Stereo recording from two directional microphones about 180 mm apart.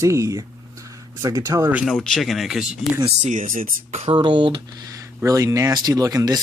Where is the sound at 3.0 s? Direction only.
40° right (ahead or behind).